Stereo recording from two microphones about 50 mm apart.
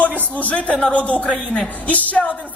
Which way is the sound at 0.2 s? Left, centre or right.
Left.